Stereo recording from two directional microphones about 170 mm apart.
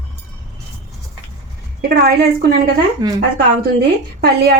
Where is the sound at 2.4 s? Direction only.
75° right (ahead or behind).